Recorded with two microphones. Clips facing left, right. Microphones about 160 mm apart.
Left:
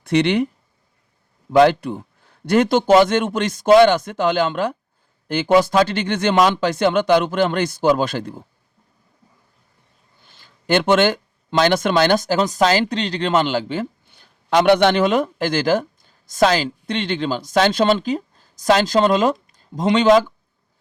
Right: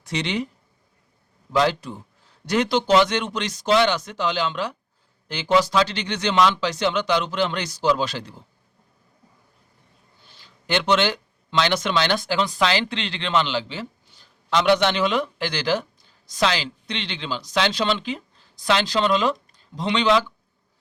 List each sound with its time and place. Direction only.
0.0 s speech: 60° left (ahead or behind)
1.5 s a man's voice: 60° left (ahead or behind)
10.2 s speech: 50° left (ahead or behind)